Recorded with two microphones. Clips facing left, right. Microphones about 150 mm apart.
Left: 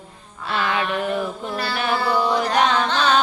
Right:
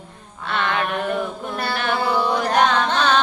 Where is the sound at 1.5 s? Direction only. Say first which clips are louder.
Right 2 dB; 50° right (ahead or behind).